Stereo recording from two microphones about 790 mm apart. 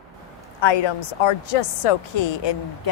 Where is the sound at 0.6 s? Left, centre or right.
Left.